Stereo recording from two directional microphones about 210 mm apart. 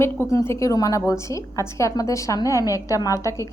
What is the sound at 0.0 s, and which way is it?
A woman's voice, 10° left (ahead or behind).